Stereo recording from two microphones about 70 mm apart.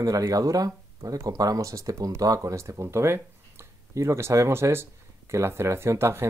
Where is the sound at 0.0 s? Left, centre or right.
Right.